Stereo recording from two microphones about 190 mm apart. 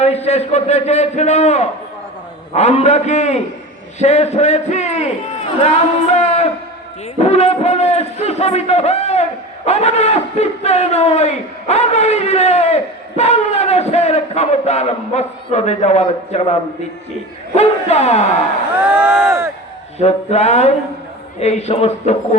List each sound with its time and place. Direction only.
0.0 s a man's voice: 35° left (ahead or behind)
6.1 s a man's voice: 35° left (ahead or behind)
18.8 s speech: 10° right (ahead or behind)
20.0 s a man's voice: 35° left (ahead or behind)